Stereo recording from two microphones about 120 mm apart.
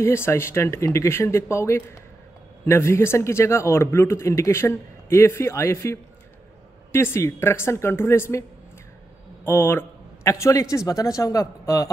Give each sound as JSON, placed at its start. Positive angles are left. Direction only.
{"t": 0.0, "sound": "a man's voice", "side_deg": 20}